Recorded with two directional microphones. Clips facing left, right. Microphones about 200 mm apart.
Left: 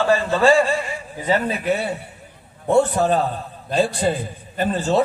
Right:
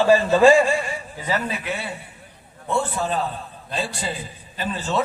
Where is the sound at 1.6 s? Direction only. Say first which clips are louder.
Left 8 dB; 40° left (ahead or behind).